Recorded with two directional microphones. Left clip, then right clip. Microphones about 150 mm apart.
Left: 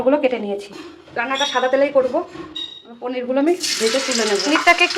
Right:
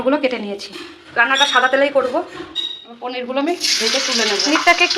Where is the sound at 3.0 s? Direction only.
45° left (ahead or behind).